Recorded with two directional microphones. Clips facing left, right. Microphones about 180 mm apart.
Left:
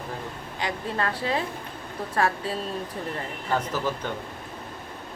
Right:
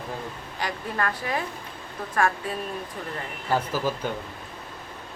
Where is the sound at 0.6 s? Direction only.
25° left (ahead or behind).